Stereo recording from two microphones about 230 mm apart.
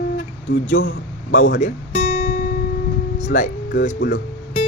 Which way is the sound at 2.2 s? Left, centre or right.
Left.